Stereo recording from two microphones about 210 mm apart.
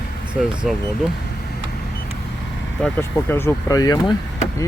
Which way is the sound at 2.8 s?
10° left (ahead or behind).